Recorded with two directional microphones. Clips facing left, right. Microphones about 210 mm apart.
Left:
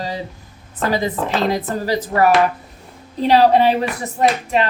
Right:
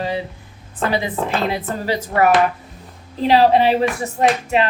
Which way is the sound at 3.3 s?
40° left (ahead or behind).